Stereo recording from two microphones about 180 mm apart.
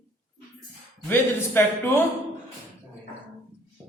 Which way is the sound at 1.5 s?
10° left (ahead or behind).